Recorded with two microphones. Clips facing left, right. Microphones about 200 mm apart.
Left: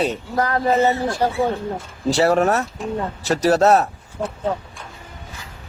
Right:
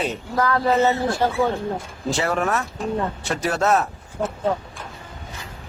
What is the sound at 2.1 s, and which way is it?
Speech, 40° left (ahead or behind).